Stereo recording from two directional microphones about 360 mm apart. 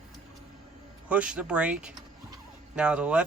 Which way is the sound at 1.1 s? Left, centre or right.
Centre.